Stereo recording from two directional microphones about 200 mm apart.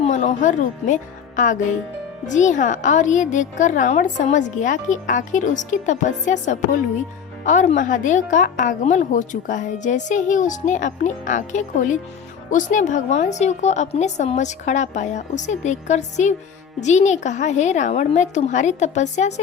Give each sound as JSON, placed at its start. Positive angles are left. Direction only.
{"t": 0.0, "sound": "a woman's voice", "side_deg": 35}